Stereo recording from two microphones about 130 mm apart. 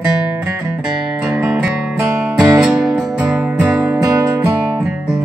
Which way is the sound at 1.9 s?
20° right (ahead or behind).